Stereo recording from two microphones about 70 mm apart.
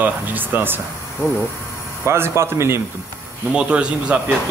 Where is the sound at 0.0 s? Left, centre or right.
Right.